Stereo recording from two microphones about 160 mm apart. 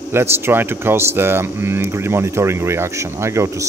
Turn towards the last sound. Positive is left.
turn(degrees=-15)  # may be behind; listen again after turning